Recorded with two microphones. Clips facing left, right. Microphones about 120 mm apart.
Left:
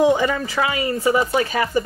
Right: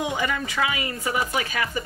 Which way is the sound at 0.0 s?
35° left (ahead or behind).